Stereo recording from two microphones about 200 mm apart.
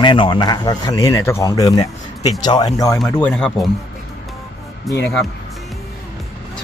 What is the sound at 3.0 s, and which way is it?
Speech, 5° left (ahead or behind).